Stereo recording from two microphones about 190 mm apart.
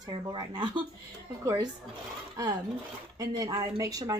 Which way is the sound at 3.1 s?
20° right (ahead or behind).